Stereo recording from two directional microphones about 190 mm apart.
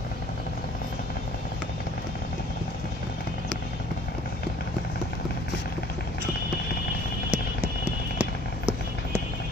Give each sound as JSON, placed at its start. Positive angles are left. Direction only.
{"t": 7.2, "sound": "run", "side_deg": -10}